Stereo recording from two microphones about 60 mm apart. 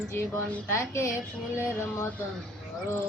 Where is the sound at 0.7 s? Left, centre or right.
Left.